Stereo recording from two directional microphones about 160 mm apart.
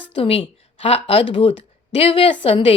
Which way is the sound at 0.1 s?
35° left (ahead or behind).